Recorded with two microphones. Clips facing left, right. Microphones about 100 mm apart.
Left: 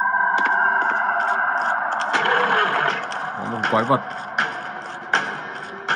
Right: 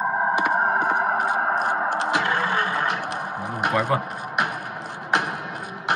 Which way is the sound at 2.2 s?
60° left (ahead or behind).